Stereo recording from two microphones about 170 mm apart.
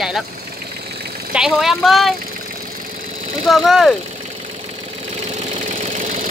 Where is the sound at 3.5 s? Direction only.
Centre (ahead or behind).